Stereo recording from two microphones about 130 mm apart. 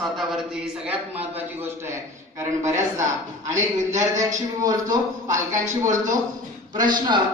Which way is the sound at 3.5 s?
70° right (ahead or behind).